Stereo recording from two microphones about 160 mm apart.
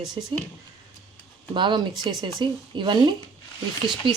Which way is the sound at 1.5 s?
30° right (ahead or behind).